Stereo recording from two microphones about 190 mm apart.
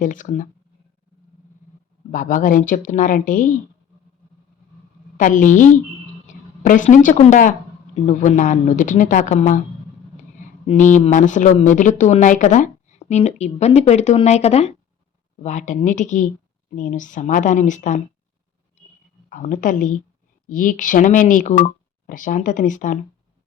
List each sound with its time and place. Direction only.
0.0 s a woman's voice: 45° left (ahead or behind)
2.1 s a woman's voice: 45° left (ahead or behind)
5.1 s a woman's voice: 45° left (ahead or behind)
6.2 s a sound: 40° left (ahead or behind)
6.9 s a woman's voice: 45° left (ahead or behind)
10.7 s speech: 40° left (ahead or behind)
19.3 s a woman's voice: 45° left (ahead or behind)